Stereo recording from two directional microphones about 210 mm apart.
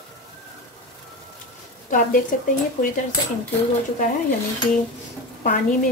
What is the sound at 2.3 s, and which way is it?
Speech, 40° left (ahead or behind).